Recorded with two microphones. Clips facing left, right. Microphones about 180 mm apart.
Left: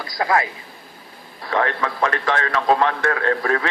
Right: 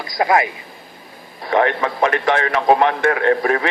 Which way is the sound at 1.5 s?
20° right (ahead or behind).